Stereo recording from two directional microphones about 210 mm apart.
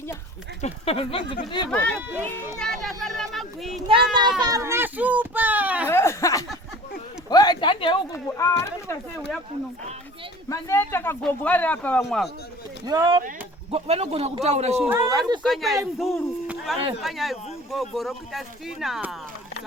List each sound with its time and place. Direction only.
0.6 s speech: 25° left (ahead or behind)
1.7 s speech: 5° left (ahead or behind)
2.0 s a child's voice: 10° right (ahead or behind)
2.6 s children playing: centre (ahead or behind)
3.8 s a child's voice: 25° right (ahead or behind); by 5.9 s 5° right (ahead or behind)
5.9 s a sound: 10° left (ahead or behind)
7.3 s speech: 20° left (ahead or behind)
10.5 s speech: 10° left (ahead or behind)
12.8 s speech: 20° right (ahead or behind)
14.8 s a child's voice: 15° right (ahead or behind)
15.4 s speech: centre (ahead or behind)